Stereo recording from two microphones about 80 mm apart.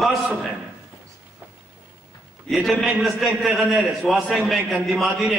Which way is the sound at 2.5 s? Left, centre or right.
Centre.